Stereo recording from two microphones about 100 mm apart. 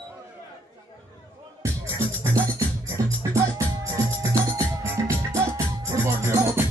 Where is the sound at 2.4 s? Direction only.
30° right (ahead or behind).